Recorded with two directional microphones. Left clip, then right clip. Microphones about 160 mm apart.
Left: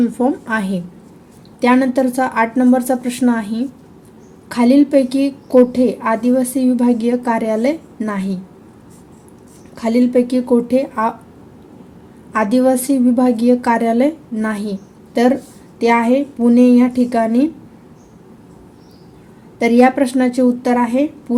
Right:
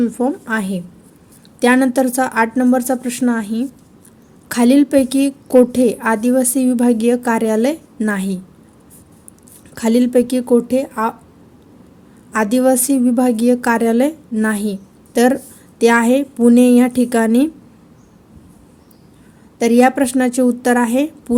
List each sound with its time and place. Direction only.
0.0 s speech: 30° right (ahead or behind)
1.6 s speech: 50° right (ahead or behind)
4.4 s a woman's voice: 50° right (ahead or behind)
9.7 s a woman's voice: 55° right (ahead or behind); by 11.1 s 35° right (ahead or behind)
12.3 s a woman's voice: 40° right (ahead or behind); by 17.5 s 55° right (ahead or behind)
19.5 s a woman's voice: 40° right (ahead or behind)